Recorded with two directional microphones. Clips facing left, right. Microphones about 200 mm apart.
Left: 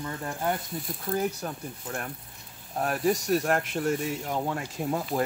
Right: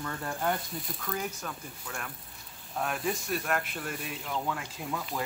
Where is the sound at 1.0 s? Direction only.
35° left (ahead or behind).